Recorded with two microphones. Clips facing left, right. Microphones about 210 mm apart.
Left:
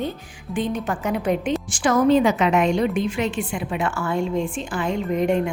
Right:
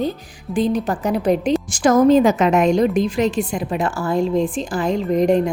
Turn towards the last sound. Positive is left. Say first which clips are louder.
# right 5 dB
turn(degrees=-35)  # may be behind; listen again after turning